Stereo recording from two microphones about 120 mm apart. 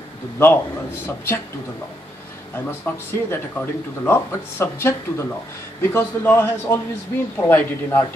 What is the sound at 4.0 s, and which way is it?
A man's voice, 20° left (ahead or behind).